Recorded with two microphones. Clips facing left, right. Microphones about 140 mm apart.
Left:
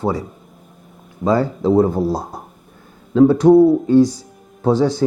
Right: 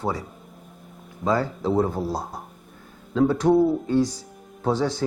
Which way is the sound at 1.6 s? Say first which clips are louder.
Left 8 dB; 35° left (ahead or behind).